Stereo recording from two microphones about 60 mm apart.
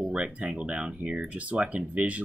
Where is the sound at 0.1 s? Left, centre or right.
Centre.